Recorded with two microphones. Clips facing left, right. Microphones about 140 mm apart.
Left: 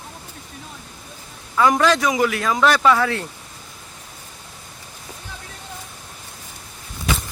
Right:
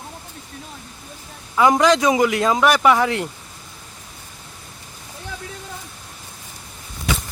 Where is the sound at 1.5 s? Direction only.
15° right (ahead or behind).